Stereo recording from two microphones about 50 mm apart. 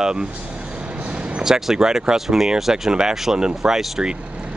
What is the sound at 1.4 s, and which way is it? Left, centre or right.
Speech, centre.